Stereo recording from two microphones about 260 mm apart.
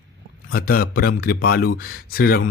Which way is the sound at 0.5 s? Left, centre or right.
Left.